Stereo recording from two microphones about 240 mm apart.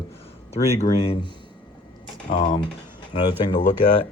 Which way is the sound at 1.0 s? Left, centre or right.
Left.